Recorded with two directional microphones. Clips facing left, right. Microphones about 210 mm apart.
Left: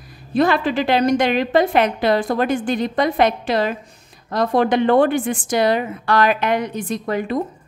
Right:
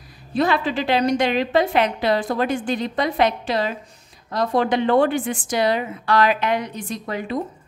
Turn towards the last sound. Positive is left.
turn(degrees=55)  # may be behind; listen again after turning